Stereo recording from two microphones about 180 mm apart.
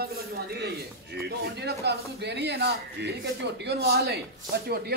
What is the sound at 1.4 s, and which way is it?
A man's voice, 65° right (ahead or behind).